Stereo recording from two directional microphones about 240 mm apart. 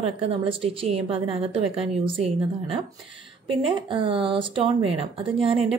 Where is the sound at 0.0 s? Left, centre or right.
Right.